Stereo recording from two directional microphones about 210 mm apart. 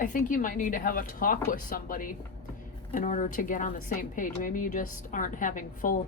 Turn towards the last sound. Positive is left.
turn(degrees=40)  # may be behind; listen again after turning